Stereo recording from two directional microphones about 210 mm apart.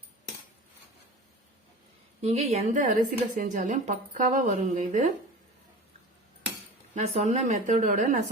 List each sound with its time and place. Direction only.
2.2 s a woman's voice: 30° right (ahead or behind)
6.9 s a woman's voice: 35° right (ahead or behind)